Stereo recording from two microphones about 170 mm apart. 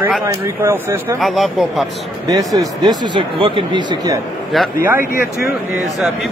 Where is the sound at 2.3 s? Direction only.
20° right (ahead or behind).